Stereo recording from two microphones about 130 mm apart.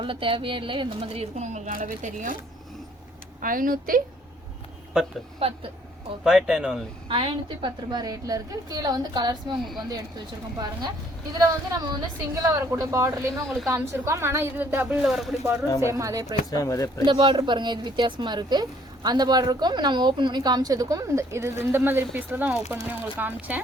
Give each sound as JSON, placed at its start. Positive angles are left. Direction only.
{"t": 0.0, "sound": "speech", "side_deg": -40}
{"t": 3.4, "sound": "a woman's voice", "side_deg": -90}
{"t": 5.4, "sound": "speech", "side_deg": -45}
{"t": 6.2, "sound": "speech", "side_deg": -5}
{"t": 7.1, "sound": "a woman's voice", "side_deg": -40}
{"t": 15.0, "sound": "speech", "side_deg": 0}
{"t": 15.8, "sound": "a woman's voice", "side_deg": -25}
{"t": 16.2, "sound": "speech", "side_deg": 30}
{"t": 17.1, "sound": "speech", "side_deg": -40}